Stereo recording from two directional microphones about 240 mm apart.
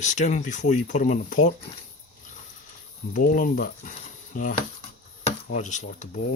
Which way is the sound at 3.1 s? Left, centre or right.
Left.